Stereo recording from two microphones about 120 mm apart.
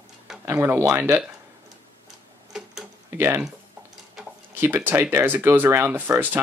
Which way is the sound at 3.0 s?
20° right (ahead or behind).